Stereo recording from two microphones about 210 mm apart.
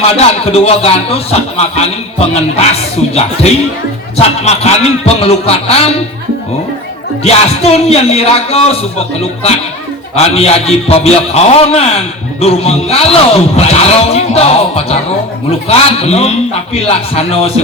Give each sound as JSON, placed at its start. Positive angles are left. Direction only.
{"t": 0.2, "sound": "speech", "side_deg": 30}
{"t": 7.3, "sound": "speech", "side_deg": 30}
{"t": 10.2, "sound": "speech", "side_deg": 30}